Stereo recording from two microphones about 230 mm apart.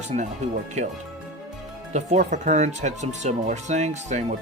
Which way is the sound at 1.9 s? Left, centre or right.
Right.